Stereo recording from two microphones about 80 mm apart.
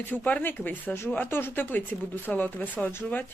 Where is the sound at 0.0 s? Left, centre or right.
Left.